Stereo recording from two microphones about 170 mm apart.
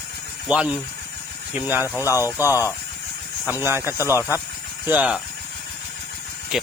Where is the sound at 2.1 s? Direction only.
20° left (ahead or behind).